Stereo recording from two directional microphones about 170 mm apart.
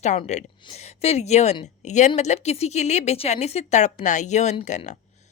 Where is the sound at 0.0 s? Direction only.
45° left (ahead or behind).